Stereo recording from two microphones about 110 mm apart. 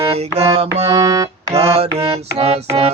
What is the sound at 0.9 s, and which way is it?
Music, 30° right (ahead or behind).